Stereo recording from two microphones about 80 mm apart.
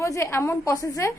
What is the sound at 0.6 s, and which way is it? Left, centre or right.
Speech, left.